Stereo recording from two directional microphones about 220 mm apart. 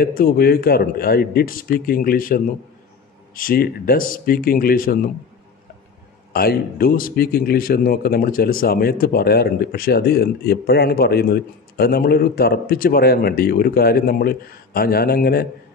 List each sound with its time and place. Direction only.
0.0 s speech: 40° left (ahead or behind)
6.3 s a man's voice: 45° left (ahead or behind)